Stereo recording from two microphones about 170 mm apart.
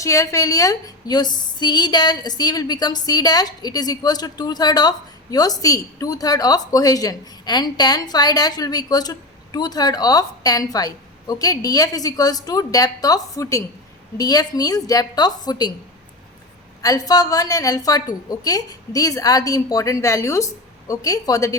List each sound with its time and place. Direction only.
0.0 s a woman's voice: 20° left (ahead or behind)
16.8 s a woman's voice: 20° left (ahead or behind)